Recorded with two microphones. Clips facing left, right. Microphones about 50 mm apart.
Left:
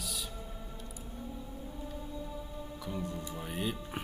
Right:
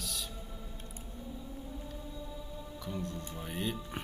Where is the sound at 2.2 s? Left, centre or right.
Left.